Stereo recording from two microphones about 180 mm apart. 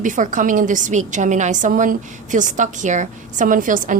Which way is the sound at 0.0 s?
45° right (ahead or behind).